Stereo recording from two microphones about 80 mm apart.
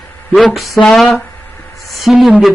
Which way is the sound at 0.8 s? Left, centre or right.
Centre.